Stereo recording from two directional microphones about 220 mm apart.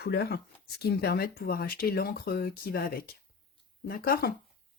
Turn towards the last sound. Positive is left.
turn(degrees=45)  # may be behind; listen again after turning